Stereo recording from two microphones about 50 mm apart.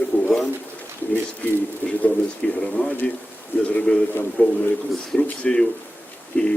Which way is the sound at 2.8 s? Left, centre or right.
Left.